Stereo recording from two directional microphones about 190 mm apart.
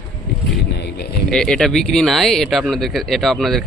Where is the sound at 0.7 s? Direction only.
60° left (ahead or behind).